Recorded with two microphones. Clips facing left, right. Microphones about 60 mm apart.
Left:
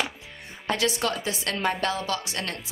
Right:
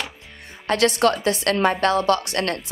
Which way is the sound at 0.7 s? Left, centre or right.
Right.